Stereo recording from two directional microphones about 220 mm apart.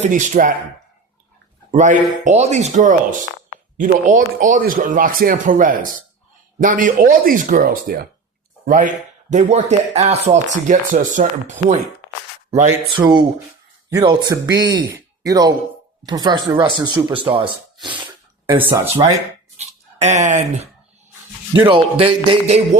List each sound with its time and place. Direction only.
0.0 s speech: 35° right (ahead or behind)
1.7 s speech: 35° right (ahead or behind)
13.0 s music: 20° right (ahead or behind)
13.9 s speech: 20° right (ahead or behind)
16.0 s music: 20° right (ahead or behind)
19.5 s speech: 30° right (ahead or behind)
21.5 s music: 20° right (ahead or behind)